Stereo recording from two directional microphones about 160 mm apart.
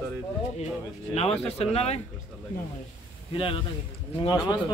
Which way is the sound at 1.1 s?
40° left (ahead or behind).